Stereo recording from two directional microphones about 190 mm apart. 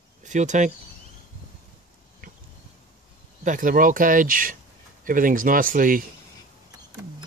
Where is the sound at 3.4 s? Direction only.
45° right (ahead or behind).